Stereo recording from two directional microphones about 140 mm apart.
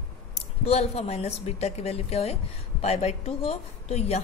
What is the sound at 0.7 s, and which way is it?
A woman's voice, 50° left (ahead or behind).